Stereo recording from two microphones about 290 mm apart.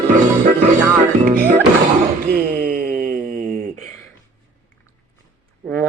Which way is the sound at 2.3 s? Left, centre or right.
Right.